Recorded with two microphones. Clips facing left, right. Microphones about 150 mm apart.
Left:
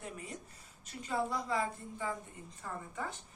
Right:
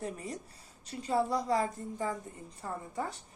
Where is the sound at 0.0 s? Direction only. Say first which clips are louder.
Right 6 dB; 35° right (ahead or behind).